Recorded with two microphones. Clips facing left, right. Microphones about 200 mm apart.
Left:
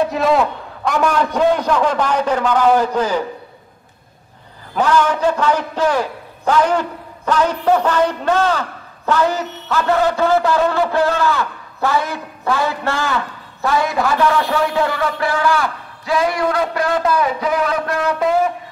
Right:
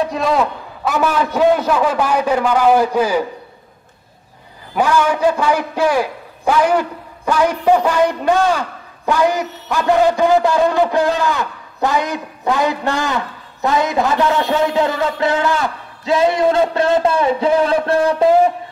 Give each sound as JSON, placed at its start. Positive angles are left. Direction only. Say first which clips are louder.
{"t": 0.0, "sound": "a man's voice", "louder": "left 1 dB", "side_deg": 0}
{"t": 4.7, "sound": "a man's voice", "louder": "even", "side_deg": -10}